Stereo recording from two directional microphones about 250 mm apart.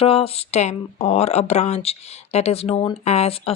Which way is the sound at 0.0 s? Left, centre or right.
Left.